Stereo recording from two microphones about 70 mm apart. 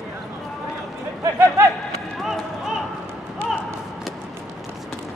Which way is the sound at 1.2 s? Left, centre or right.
Right.